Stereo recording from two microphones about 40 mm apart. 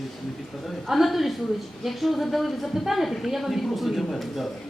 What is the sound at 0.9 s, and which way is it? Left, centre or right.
A woman's voice, centre.